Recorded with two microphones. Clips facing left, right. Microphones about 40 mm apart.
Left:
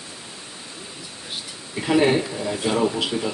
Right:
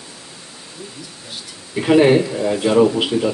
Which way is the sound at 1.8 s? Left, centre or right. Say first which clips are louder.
Right 6 dB; right.